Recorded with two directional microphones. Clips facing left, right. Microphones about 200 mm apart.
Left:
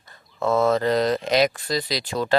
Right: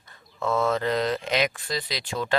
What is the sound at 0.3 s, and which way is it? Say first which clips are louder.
Speech: left 5 dB; 40° left (ahead or behind).